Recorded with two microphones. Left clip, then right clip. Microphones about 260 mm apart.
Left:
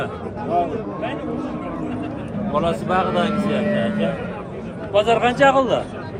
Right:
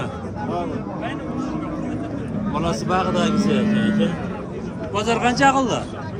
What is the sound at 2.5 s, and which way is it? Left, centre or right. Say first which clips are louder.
A man's voice: left 3 dB; centre.